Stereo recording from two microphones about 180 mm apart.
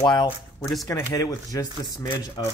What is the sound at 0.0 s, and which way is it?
Speech, 20° left (ahead or behind).